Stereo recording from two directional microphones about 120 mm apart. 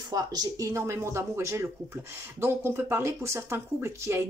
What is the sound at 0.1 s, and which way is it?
Speech, 30° right (ahead or behind).